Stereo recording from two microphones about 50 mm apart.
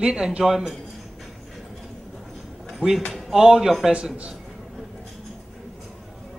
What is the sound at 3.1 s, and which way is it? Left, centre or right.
Speech, centre.